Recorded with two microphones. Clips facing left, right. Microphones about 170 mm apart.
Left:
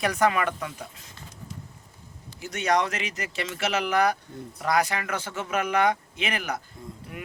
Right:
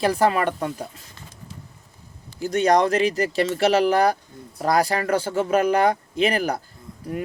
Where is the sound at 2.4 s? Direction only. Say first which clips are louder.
Right 7 dB; 35° right (ahead or behind).